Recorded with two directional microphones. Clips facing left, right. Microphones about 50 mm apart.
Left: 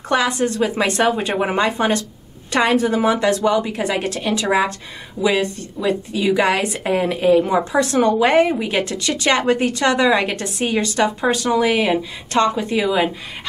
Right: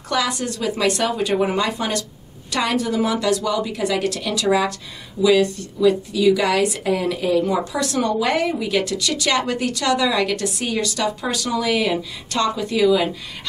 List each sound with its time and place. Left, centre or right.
0.1 s a woman's voice: left